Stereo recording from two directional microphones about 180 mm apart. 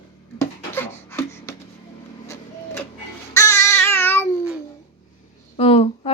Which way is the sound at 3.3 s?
15° left (ahead or behind).